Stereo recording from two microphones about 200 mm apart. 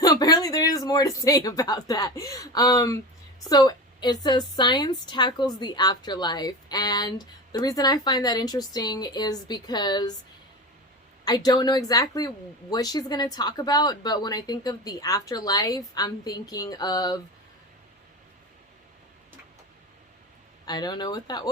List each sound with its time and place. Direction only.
0.0 s a sound: 20° left (ahead or behind)
0.9 s a woman's voice: 20° left (ahead or behind)
11.3 s a woman's voice: 20° left (ahead or behind)
20.7 s a woman's voice: 20° left (ahead or behind)